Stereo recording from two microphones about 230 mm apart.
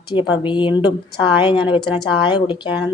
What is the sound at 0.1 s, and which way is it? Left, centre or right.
Speech, left.